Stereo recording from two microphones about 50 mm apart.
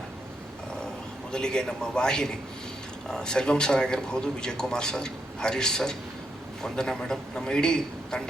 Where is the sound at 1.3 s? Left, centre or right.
Centre.